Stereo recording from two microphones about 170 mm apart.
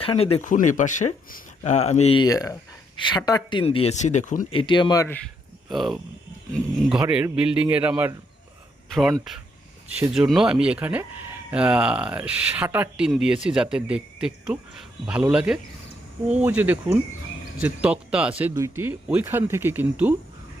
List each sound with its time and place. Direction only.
0.0 s speech: 35° left (ahead or behind)
0.4 s speech: 50° left (ahead or behind)
2.1 s speech: 20° left (ahead or behind); by 4.4 s 45° left (ahead or behind)
4.5 s speech: 30° left (ahead or behind)
5.7 s speech: centre (ahead or behind)